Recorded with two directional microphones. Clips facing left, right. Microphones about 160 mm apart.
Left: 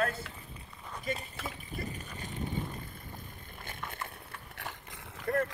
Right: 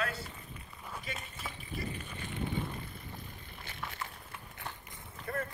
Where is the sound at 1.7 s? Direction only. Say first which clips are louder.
Even; 40° left (ahead or behind).